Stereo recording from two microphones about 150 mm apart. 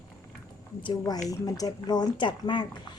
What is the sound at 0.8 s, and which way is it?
Speech, 30° left (ahead or behind).